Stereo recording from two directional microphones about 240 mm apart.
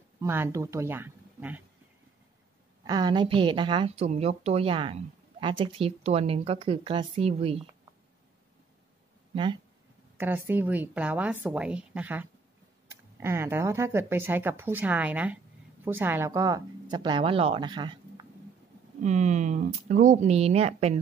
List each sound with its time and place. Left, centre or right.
0.2 s speech: centre
2.8 s a woman's voice: centre
9.3 s speech: right
10.1 s speech: centre
19.0 s a woman's voice: right